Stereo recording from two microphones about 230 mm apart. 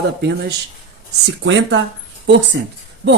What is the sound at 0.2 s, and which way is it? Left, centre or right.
Speech, right.